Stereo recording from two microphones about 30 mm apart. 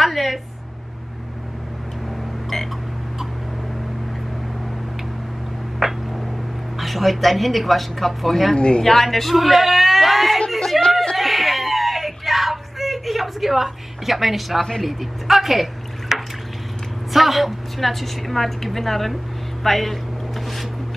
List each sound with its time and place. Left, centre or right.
0.0 s a woman's voice: centre
5.8 s a sound: centre
6.8 s a woman's voice: centre
8.5 s speech: left
8.8 s speech: centre
11.1 s a sound: centre
14.8 s a woman's voice: centre
16.1 s water: centre
17.1 s a woman's voice: centre
19.6 s a sound: centre